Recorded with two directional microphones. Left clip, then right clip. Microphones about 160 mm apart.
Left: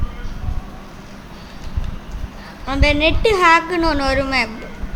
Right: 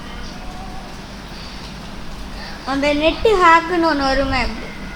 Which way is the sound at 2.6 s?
5° left (ahead or behind).